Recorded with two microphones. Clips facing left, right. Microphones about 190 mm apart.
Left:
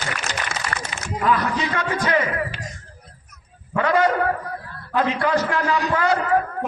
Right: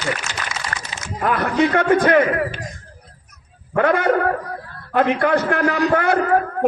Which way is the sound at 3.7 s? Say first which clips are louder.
Right 2 dB; 55° right (ahead or behind).